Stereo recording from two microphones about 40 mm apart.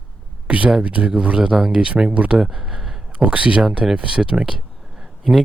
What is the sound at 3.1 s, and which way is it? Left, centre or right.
Speech, right.